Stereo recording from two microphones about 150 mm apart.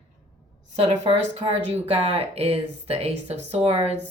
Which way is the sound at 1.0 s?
45° right (ahead or behind).